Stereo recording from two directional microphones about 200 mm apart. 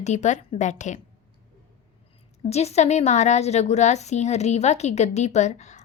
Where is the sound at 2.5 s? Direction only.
30° left (ahead or behind).